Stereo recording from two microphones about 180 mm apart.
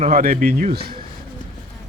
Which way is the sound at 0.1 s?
50° right (ahead or behind).